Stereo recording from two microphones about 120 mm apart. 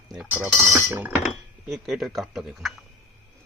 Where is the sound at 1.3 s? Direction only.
Centre (ahead or behind).